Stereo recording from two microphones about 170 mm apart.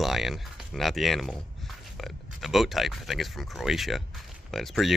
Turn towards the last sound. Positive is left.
turn(degrees=0)  # may be behind; listen again after turning